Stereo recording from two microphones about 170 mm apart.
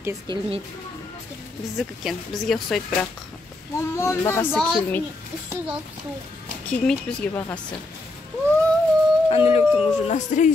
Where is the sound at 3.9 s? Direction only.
15° left (ahead or behind).